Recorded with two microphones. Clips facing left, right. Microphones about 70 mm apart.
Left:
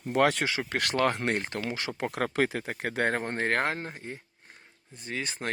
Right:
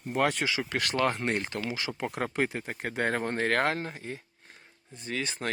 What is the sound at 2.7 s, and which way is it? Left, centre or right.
Speech, left.